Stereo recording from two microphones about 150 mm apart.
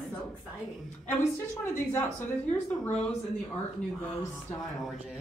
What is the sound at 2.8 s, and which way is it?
Speech, 10° left (ahead or behind).